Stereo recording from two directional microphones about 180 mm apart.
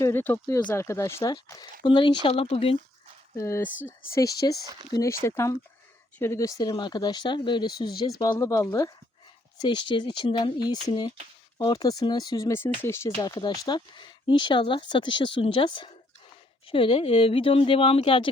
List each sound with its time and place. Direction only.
0.0 s speech: 10° left (ahead or behind); by 2.7 s 30° left (ahead or behind)
3.3 s speech: 15° left (ahead or behind); by 18.3 s 30° left (ahead or behind)